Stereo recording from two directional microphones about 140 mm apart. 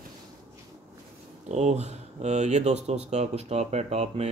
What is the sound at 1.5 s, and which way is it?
Speech, 55° right (ahead or behind).